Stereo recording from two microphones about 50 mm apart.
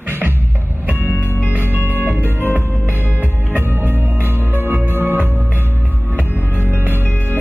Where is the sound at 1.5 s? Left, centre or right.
Right.